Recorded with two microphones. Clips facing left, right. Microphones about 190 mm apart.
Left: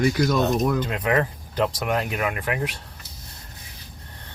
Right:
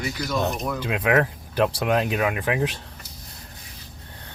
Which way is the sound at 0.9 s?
10° right (ahead or behind).